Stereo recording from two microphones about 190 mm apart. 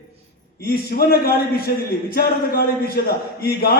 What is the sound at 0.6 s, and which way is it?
A man's voice, 55° left (ahead or behind).